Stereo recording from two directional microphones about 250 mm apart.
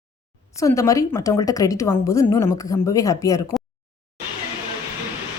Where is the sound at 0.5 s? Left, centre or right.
Centre.